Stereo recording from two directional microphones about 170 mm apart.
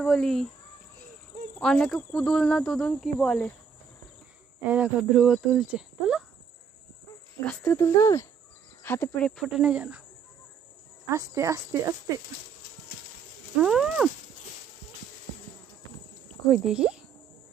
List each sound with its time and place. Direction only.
0.0 s speech: 5° left (ahead or behind)
1.6 s speech: 5° left (ahead or behind)
4.6 s speech: 5° right (ahead or behind)
7.4 s speech: 10° left (ahead or behind)
9.4 s speech: 5° right (ahead or behind)
11.1 s speech: 20° right (ahead or behind)
13.6 s speech: 5° right (ahead or behind)
16.4 s speech: 5° right (ahead or behind)